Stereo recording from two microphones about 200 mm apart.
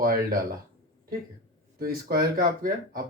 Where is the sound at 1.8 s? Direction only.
50° right (ahead or behind).